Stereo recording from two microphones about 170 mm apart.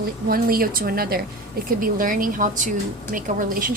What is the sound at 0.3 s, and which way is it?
A woman's voice, 60° right (ahead or behind).